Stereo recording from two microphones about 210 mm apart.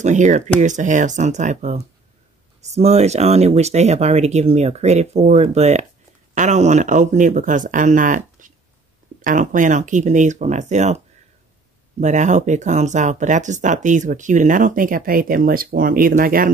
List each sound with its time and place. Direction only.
0.0 s speech: 35° right (ahead or behind)
12.0 s speech: 35° right (ahead or behind)